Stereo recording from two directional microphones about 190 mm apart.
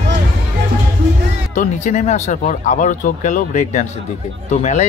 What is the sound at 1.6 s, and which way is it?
Speech, 40° left (ahead or behind).